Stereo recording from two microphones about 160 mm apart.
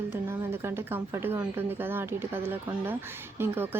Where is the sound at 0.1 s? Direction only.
15° right (ahead or behind).